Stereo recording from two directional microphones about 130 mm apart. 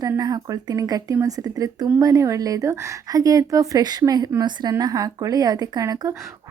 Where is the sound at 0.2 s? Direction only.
25° right (ahead or behind).